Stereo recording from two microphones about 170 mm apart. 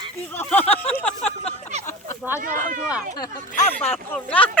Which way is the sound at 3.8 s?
10° left (ahead or behind).